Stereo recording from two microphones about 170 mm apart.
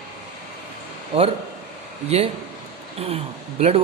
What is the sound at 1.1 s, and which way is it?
Speech, 35° right (ahead or behind).